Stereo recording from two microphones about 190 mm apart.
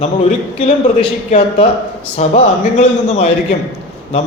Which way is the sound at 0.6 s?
35° left (ahead or behind).